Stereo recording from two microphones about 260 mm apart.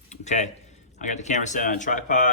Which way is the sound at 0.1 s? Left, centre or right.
Left.